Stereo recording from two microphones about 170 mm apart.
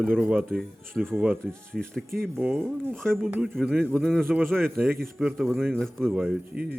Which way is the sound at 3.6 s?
5° left (ahead or behind).